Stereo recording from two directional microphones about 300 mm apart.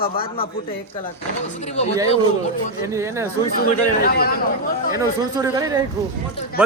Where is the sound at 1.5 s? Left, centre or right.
Left.